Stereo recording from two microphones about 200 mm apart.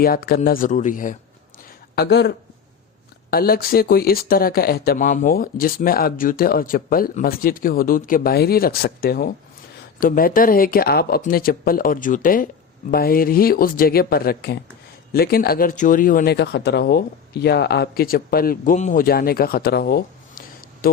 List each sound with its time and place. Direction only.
0.0 s speech: 50° left (ahead or behind)
2.0 s speech: 55° left (ahead or behind)